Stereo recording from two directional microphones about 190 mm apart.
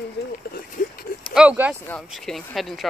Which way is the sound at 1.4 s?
5° right (ahead or behind).